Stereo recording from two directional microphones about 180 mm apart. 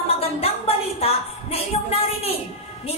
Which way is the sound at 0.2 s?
35° left (ahead or behind).